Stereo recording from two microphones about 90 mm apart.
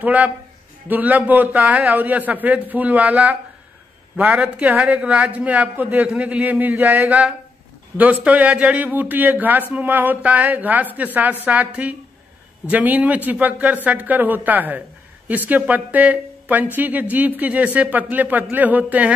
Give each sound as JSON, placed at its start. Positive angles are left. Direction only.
{"t": 0.0, "sound": "a man's voice", "side_deg": -15}